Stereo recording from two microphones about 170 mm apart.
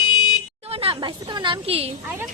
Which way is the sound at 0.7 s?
35° right (ahead or behind).